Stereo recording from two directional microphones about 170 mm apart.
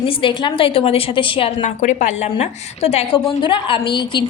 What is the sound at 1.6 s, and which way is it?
A woman's voice, 45° left (ahead or behind).